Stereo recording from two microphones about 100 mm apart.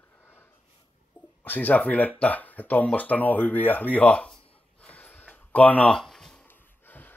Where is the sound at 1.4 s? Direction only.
20° left (ahead or behind).